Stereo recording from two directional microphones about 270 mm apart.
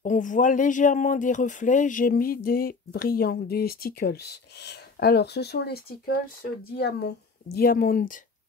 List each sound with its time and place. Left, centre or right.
0.0 s speech: left